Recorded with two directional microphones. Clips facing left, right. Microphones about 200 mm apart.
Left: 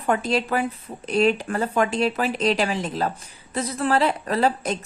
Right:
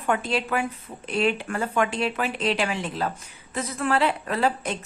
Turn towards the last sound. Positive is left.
turn(degrees=40)  # may be behind; listen again after turning